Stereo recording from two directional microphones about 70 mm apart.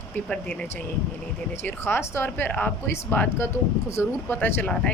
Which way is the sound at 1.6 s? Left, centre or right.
Left.